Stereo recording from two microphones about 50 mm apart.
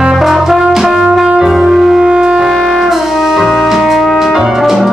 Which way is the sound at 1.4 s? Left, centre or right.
Centre.